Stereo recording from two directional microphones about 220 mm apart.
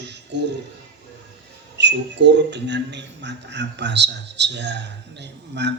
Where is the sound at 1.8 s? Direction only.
50° right (ahead or behind).